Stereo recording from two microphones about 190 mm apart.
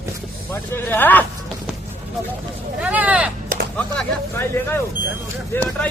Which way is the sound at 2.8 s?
5° right (ahead or behind).